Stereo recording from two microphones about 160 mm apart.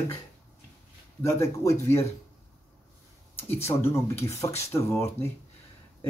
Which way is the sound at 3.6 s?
15° left (ahead or behind).